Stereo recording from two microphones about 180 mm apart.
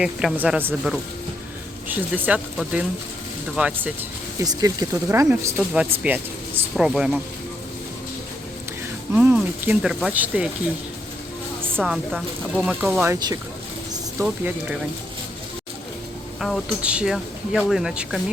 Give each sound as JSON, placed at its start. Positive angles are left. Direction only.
{"t": 0.0, "sound": "speech", "side_deg": -5}
{"t": 4.4, "sound": "speech", "side_deg": -20}
{"t": 9.1, "sound": "speech", "side_deg": -10}
{"t": 11.8, "sound": "speech", "side_deg": 0}
{"t": 13.9, "sound": "a sound", "side_deg": -15}
{"t": 16.4, "sound": "speech", "side_deg": 0}